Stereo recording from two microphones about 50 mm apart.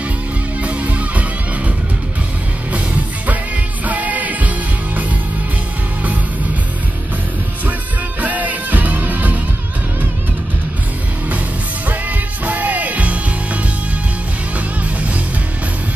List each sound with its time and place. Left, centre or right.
0.6 s music: right
2.7 s music: right
8.2 s music: right
11.9 s music: right